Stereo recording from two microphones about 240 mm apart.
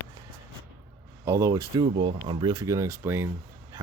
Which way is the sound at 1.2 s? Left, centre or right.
Centre.